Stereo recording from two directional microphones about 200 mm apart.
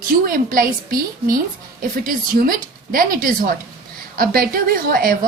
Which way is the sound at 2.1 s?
45° right (ahead or behind).